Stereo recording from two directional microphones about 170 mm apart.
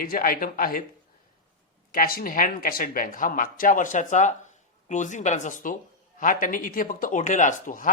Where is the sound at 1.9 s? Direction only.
60° left (ahead or behind).